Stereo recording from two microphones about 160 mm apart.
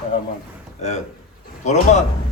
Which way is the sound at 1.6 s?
45° left (ahead or behind).